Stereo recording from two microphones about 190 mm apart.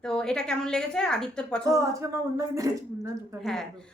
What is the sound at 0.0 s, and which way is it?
A woman's voice, 5° left (ahead or behind).